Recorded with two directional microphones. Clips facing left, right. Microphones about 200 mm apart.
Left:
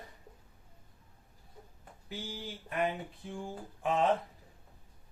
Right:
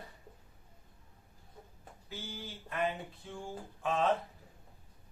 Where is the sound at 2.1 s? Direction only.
15° left (ahead or behind).